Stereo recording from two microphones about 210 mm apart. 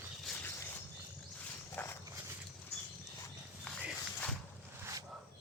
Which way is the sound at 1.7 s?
10° left (ahead or behind).